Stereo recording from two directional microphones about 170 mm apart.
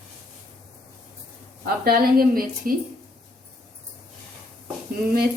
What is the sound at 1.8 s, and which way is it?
Speech, 60° right (ahead or behind).